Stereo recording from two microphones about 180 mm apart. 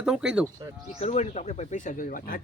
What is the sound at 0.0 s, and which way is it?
Speech, 5° right (ahead or behind).